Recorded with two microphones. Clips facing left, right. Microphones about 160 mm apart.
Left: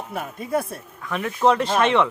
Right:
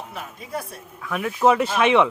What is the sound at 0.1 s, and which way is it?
Speech, 55° left (ahead or behind).